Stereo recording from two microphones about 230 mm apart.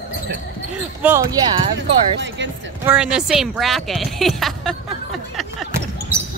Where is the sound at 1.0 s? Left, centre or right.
Centre.